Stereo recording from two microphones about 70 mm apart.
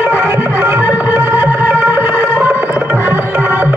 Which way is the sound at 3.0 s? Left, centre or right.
Right.